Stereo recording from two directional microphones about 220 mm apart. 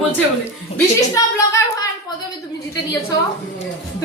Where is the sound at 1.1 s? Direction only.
15° left (ahead or behind).